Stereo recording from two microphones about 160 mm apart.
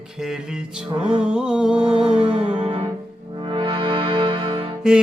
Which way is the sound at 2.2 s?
35° right (ahead or behind).